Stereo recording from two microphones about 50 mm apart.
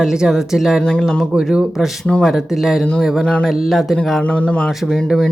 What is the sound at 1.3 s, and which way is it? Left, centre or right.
Speech, centre.